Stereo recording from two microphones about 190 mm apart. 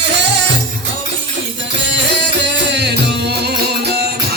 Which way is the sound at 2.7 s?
60° right (ahead or behind).